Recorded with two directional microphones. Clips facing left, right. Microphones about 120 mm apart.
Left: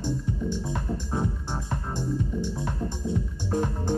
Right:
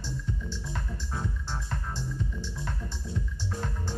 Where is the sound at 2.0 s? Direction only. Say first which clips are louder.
Left 8 dB; 50° left (ahead or behind).